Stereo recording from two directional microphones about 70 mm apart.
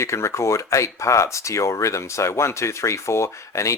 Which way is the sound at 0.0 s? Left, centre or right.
Left.